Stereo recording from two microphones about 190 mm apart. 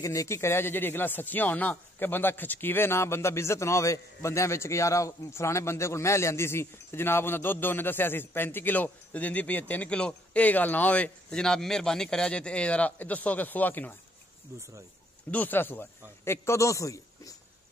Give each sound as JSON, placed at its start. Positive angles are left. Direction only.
{"t": 0.0, "sound": "speech", "side_deg": 15}
{"t": 14.5, "sound": "speech", "side_deg": -15}
{"t": 15.3, "sound": "speech", "side_deg": 10}